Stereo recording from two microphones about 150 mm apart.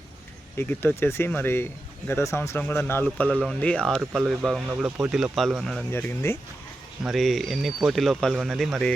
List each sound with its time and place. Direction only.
0.5 s speech: 15° left (ahead or behind)
3.2 s speech: 5° right (ahead or behind)
5.9 s speech: 15° left (ahead or behind)
7.0 s speech: centre (ahead or behind)